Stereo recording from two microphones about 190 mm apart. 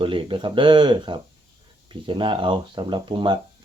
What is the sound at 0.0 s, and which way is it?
Speech, 25° right (ahead or behind).